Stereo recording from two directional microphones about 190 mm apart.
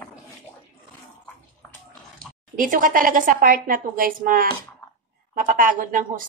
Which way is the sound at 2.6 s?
45° right (ahead or behind).